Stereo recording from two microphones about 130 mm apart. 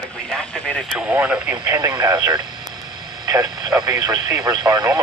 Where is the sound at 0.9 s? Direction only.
10° right (ahead or behind).